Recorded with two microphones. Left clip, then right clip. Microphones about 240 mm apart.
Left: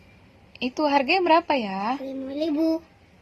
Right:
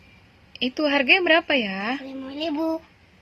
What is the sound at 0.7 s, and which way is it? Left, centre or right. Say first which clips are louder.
Speech: right 2 dB; centre.